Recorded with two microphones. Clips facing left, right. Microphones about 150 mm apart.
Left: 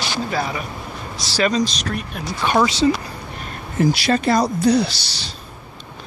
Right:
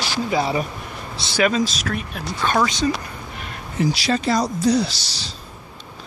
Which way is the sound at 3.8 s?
55° left (ahead or behind).